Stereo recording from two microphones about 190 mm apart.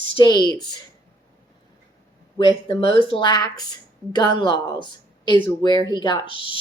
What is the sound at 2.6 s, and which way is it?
Speech, 30° left (ahead or behind).